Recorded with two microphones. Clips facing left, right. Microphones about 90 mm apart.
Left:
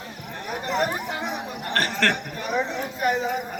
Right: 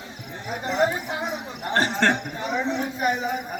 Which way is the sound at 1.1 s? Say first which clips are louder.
Even; 20° right (ahead or behind).